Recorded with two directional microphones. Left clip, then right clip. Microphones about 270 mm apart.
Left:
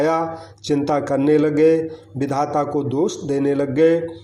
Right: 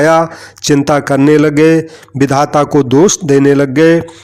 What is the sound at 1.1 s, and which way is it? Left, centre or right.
Speech, right.